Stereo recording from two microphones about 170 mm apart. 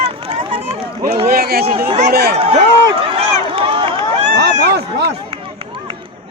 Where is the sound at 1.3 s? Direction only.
65° right (ahead or behind).